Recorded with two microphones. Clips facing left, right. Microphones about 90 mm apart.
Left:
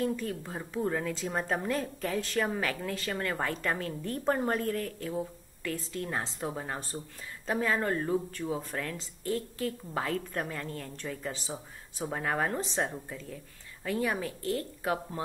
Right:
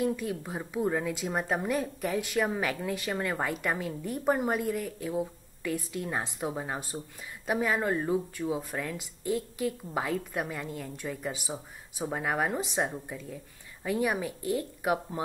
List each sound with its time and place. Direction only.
0.0 s a woman's voice: 15° right (ahead or behind)